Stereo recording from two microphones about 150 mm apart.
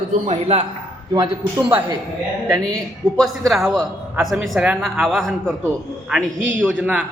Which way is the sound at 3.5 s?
Centre (ahead or behind).